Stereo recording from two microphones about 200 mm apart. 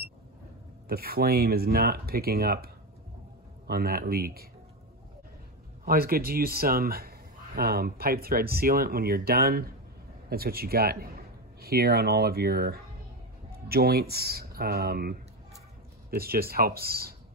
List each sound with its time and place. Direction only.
0.8 s speech: 50° right (ahead or behind)
5.9 s speech: 50° right (ahead or behind)
16.2 s speech: 50° right (ahead or behind)